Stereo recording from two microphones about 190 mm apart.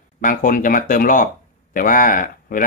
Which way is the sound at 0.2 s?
45° left (ahead or behind).